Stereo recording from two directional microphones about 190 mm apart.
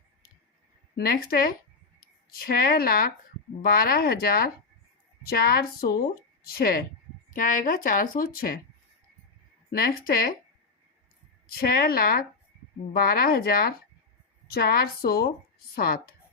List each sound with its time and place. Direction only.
0.9 s a woman's voice: 50° left (ahead or behind)
9.7 s speech: 50° left (ahead or behind)
11.4 s speech: 50° left (ahead or behind)